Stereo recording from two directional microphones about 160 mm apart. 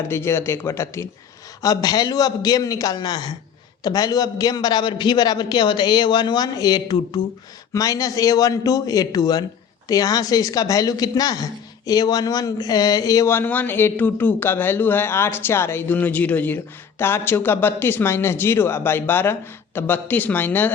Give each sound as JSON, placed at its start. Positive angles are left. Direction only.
{"t": 0.1, "sound": "a man's voice", "side_deg": 15}